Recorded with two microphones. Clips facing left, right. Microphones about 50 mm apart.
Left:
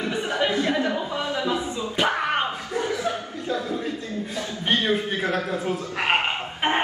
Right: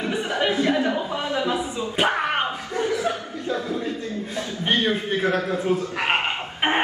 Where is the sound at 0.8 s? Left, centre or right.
Right.